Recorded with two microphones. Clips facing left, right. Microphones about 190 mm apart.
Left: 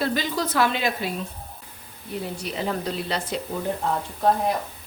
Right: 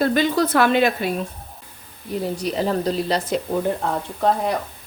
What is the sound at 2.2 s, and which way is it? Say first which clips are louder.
Speech: right 6 dB; 40° right (ahead or behind).